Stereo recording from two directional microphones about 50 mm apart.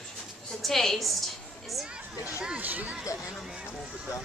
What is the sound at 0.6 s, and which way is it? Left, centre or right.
Speech, centre.